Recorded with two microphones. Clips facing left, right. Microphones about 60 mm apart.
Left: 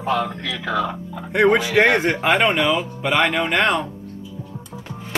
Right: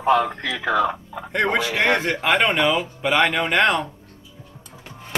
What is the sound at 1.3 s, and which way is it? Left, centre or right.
A man's voice, centre.